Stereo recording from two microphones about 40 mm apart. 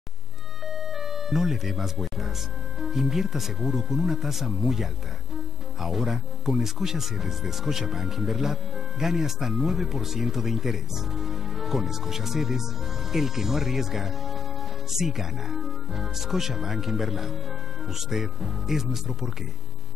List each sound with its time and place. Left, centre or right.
0.7 s music: centre
2.8 s speech: centre